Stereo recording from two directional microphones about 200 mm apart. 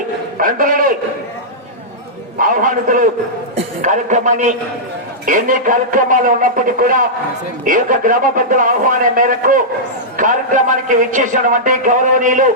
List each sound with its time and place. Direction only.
0.3 s speech: 45° right (ahead or behind)
2.4 s a man's voice: 45° right (ahead or behind)